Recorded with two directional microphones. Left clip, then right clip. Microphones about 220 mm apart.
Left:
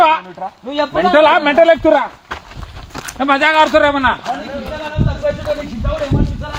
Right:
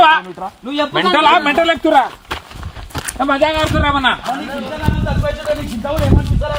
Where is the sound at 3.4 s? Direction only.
40° left (ahead or behind).